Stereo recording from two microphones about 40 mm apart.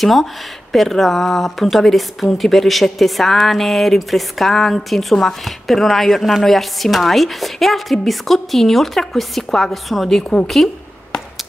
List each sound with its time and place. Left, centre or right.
0.0 s a woman's voice: centre